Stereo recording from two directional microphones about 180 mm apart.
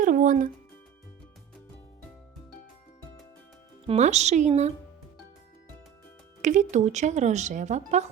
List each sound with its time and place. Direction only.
0.0 s music: 50° right (ahead or behind)
3.8 s speech: 40° right (ahead or behind)
6.4 s speech: 45° right (ahead or behind)